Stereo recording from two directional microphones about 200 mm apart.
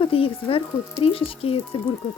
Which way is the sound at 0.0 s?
30° left (ahead or behind).